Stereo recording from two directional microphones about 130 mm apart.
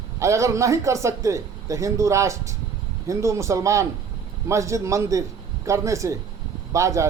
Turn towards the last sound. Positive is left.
turn(degrees=-25)  # may be behind; listen again after turning